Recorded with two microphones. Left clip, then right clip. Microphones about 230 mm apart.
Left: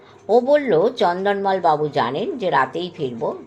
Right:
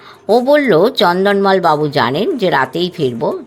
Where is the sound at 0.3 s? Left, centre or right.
Right.